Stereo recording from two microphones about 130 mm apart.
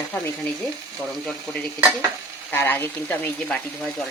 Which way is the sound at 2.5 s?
15° left (ahead or behind).